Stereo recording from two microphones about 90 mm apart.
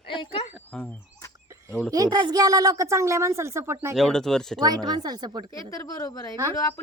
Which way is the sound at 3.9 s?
5° left (ahead or behind).